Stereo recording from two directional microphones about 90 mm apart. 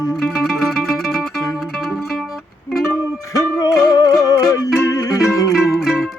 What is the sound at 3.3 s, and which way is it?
Music, 40° left (ahead or behind).